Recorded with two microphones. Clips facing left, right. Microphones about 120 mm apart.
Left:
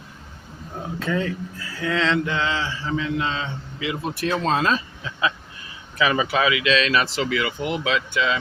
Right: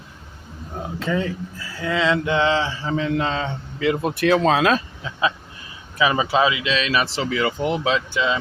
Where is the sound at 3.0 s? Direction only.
50° right (ahead or behind); by 4.7 s 90° right.